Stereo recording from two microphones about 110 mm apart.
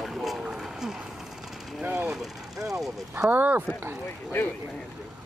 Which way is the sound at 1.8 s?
10° right (ahead or behind).